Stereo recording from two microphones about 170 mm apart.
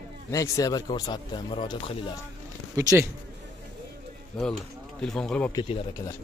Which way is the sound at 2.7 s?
20° right (ahead or behind).